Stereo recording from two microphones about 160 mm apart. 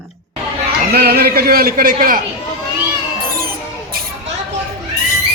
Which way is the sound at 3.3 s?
70° right (ahead or behind).